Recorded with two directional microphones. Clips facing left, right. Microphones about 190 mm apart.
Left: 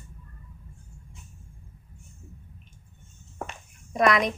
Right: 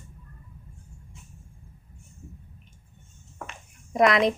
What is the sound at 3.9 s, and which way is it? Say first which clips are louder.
Speech: right 2 dB; 25° right (ahead or behind).